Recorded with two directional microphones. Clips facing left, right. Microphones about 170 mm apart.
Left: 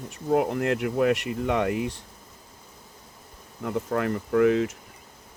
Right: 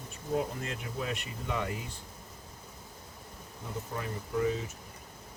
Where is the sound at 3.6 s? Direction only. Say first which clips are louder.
Left 12 dB; 70° left (ahead or behind).